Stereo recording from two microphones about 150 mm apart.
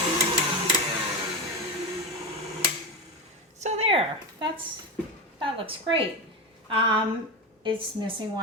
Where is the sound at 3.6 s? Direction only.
45° right (ahead or behind).